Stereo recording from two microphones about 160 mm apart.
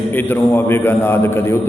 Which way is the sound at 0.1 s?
10° left (ahead or behind).